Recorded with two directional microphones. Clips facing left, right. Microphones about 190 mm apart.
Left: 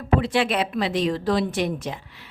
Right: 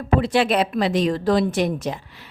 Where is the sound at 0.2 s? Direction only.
40° right (ahead or behind).